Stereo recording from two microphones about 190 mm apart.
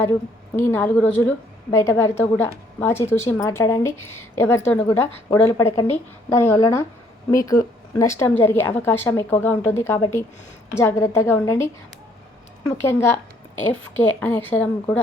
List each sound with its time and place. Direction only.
0.5 s a woman's voice: 10° left (ahead or behind)
14.2 s a woman's voice: 10° left (ahead or behind)